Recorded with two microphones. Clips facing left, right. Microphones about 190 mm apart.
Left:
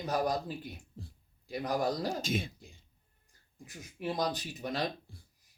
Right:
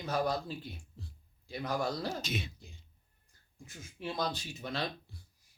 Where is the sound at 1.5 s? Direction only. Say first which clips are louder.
Left 3 dB; 35° left (ahead or behind).